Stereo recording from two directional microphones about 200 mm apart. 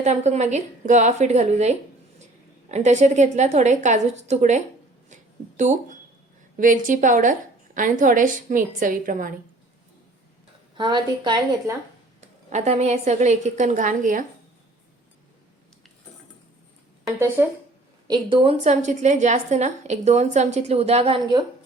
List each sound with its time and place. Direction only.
0.0 s a woman's voice: 35° right (ahead or behind)
5.0 s a sound: 40° right (ahead or behind)
6.6 s a woman's voice: 45° right (ahead or behind)
10.8 s a woman's voice: 25° right (ahead or behind)
12.2 s a woman's voice: 35° right (ahead or behind)
17.4 s speech: 10° right (ahead or behind)
18.1 s a woman's voice: 30° right (ahead or behind)